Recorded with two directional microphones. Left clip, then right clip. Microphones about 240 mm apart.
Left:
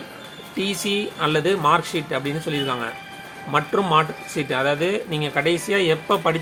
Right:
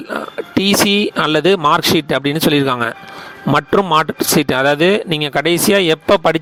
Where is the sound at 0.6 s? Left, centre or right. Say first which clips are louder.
Right 10 dB; right.